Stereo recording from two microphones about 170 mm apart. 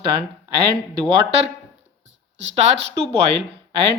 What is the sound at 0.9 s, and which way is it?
Speech, 30° right (ahead or behind).